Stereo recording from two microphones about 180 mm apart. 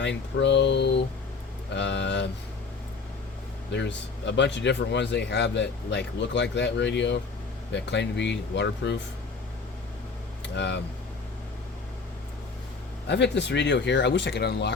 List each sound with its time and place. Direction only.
0.0 s speech: 80° left
3.7 s speech: 75° left (ahead or behind)
10.4 s speech: 75° left (ahead or behind)
13.1 s speech: 75° left (ahead or behind)